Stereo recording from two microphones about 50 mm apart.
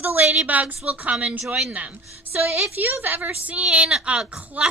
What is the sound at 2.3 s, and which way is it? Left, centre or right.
A woman's voice, right.